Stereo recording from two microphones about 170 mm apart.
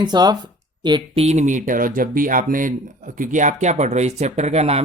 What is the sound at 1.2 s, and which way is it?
Speech, 40° right (ahead or behind).